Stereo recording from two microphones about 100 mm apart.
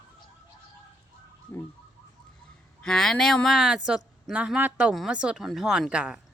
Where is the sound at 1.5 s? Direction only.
25° left (ahead or behind).